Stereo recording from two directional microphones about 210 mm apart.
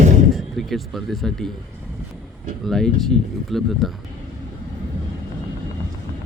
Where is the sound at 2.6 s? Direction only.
Centre (ahead or behind).